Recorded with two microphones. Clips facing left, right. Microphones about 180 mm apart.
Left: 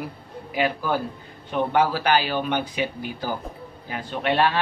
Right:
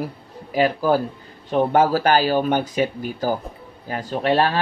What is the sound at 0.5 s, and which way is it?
Speech, 40° right (ahead or behind).